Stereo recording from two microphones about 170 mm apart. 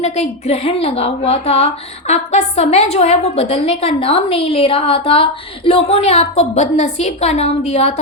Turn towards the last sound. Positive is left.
turn(degrees=40)  # may be behind; listen again after turning